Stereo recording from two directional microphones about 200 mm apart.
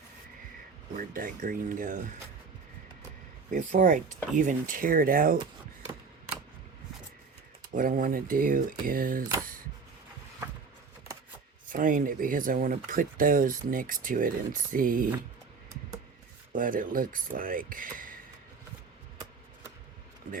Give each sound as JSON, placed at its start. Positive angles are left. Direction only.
{"t": 0.9, "sound": "speech", "side_deg": -45}
{"t": 3.5, "sound": "speech", "side_deg": -40}
{"t": 7.8, "sound": "speech", "side_deg": -45}
{"t": 11.7, "sound": "speech", "side_deg": -40}
{"t": 16.5, "sound": "speech", "side_deg": -45}